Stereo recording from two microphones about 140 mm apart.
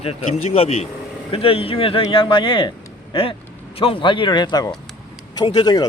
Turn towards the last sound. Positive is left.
turn(degrees=30)  # may be behind; listen again after turning